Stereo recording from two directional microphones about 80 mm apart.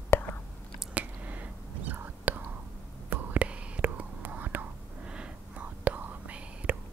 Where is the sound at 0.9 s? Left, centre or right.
Centre.